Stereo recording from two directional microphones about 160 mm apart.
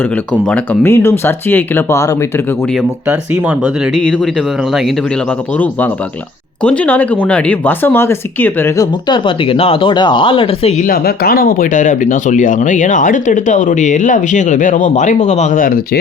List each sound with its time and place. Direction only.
0.5 s speech: 10° left (ahead or behind)
6.6 s speech: 10° left (ahead or behind)
9.0 s speech: 30° left (ahead or behind)
10.8 s speech: 70° left (ahead or behind)